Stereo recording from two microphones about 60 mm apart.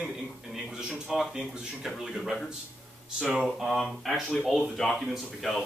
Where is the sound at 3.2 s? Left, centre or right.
Centre.